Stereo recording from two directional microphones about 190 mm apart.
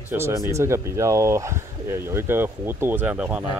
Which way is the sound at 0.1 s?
15° right (ahead or behind).